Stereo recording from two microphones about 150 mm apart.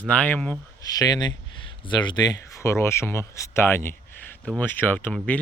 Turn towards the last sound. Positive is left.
turn(degrees=10)  # may be behind; listen again after turning